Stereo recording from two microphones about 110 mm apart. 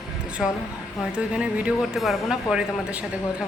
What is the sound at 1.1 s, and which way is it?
Speech, 10° right (ahead or behind).